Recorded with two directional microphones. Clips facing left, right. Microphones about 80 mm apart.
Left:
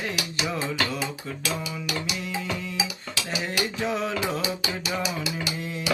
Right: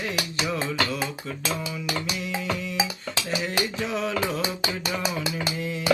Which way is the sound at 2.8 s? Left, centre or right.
Right.